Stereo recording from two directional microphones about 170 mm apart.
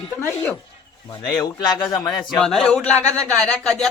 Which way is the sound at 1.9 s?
Centre (ahead or behind).